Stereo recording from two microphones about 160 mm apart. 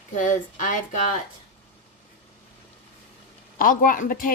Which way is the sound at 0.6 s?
50° left (ahead or behind).